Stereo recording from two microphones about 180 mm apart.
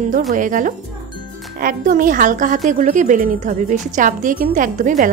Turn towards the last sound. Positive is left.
turn(degrees=-45)  # may be behind; listen again after turning